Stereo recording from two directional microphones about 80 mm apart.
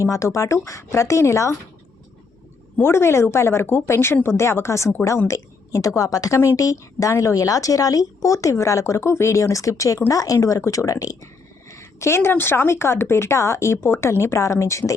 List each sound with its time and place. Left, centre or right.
0.0 s a woman's voice: left
2.8 s a woman's voice: left